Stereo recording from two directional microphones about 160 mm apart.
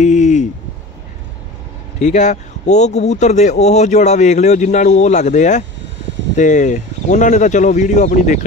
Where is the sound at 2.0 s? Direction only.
45° left (ahead or behind).